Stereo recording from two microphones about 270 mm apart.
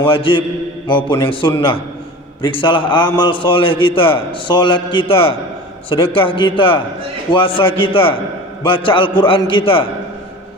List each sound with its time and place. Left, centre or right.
0.0 s a man's voice: centre